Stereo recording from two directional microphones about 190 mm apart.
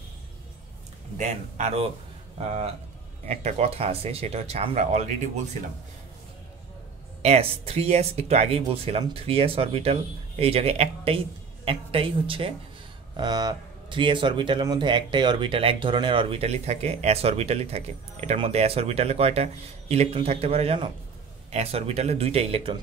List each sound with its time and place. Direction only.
1.1 s speech: 35° right (ahead or behind)
3.3 s speech: 35° right (ahead or behind)
7.2 s a woman's voice: 35° right (ahead or behind)